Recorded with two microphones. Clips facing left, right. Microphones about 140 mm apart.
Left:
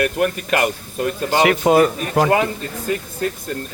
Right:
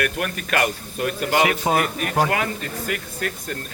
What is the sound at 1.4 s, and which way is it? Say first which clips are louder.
Speech: left 5 dB; 80° left.